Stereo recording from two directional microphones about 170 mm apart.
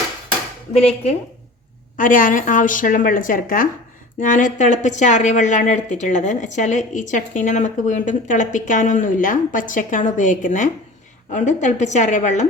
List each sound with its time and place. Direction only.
2.0 s speech: 55° left (ahead or behind)